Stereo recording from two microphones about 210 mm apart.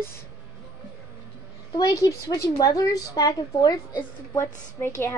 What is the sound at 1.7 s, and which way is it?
A woman's voice, 15° left (ahead or behind).